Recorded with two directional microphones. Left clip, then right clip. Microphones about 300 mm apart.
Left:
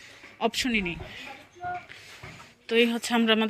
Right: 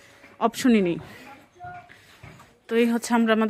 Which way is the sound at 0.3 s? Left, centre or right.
Centre.